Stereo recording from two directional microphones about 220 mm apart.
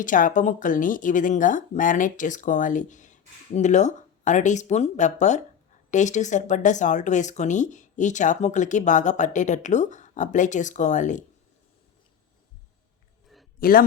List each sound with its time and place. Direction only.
0.0 s speech: 35° left (ahead or behind)
13.6 s a man's voice: 40° left (ahead or behind)